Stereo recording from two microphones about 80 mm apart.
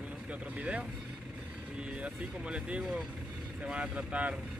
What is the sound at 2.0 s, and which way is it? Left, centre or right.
Speech, centre.